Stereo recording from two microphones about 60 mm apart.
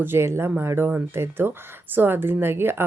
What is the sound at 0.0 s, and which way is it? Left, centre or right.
Speech, right.